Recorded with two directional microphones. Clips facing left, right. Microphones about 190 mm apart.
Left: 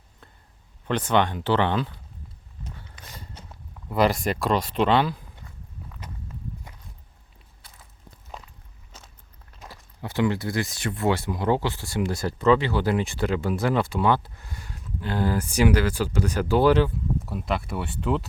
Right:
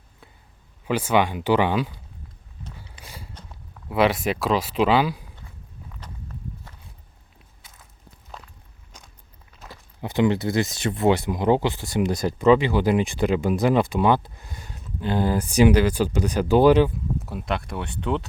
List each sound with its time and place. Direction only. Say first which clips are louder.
0.9 s speech: right 2 dB; 10° right (ahead or behind)
3.0 s a sound: right 3 dB; 10° right (ahead or behind)
3.8 s speech: right 1 dB; centre (ahead or behind)
10.0 s speech: right 4 dB; 20° right (ahead or behind)
17.2 s speech: even; centre (ahead or behind)